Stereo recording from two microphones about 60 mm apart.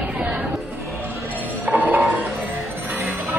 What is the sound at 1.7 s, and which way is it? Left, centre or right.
Music, right.